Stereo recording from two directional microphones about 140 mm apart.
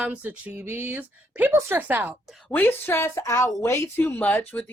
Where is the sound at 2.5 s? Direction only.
15° left (ahead or behind).